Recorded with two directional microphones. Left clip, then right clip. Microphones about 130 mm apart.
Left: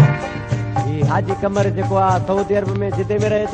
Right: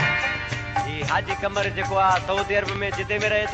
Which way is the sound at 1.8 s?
45° left (ahead or behind).